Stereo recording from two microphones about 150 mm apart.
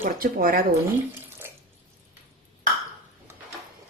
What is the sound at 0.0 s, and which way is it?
Speech, 70° right (ahead or behind).